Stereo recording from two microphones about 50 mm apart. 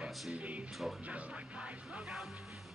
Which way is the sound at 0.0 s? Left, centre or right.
Right.